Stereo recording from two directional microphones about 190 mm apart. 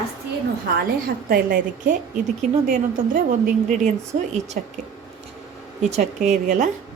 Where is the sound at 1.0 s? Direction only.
50° right (ahead or behind).